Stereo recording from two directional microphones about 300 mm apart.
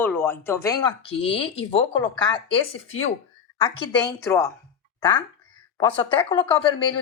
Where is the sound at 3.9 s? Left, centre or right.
Centre.